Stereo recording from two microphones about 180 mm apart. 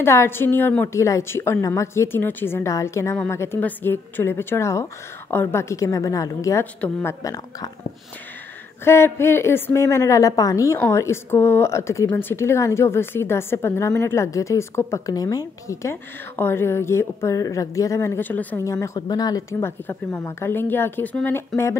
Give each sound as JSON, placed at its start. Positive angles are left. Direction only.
{"t": 0.0, "sound": "a woman's voice", "side_deg": 15}
{"t": 8.8, "sound": "a woman's voice", "side_deg": 15}